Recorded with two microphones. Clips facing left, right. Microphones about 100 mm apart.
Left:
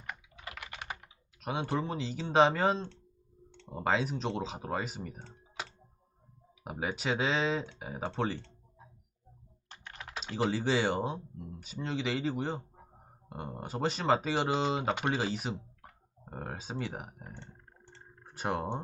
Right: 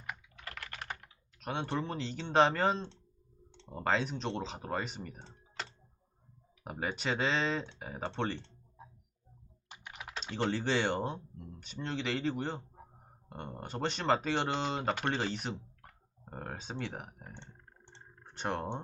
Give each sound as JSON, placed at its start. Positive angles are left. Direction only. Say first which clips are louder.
{"t": 0.0, "sound": "computer keyboard", "louder": "left 1 dB", "side_deg": -5}
{"t": 1.4, "sound": "speech", "louder": "left 2 dB", "side_deg": 5}
{"t": 6.6, "sound": "speech", "louder": "left 2 dB", "side_deg": 5}
{"t": 9.6, "sound": "computer keyboard", "louder": "even", "side_deg": -15}
{"t": 10.2, "sound": "speech", "louder": "left 2 dB", "side_deg": 5}
{"t": 17.4, "sound": "a sound", "louder": "left 2 dB", "side_deg": -20}
{"t": 18.2, "sound": "speech", "louder": "left 2 dB", "side_deg": 5}